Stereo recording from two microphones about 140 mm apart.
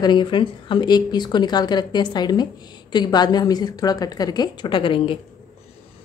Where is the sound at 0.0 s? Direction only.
35° left (ahead or behind).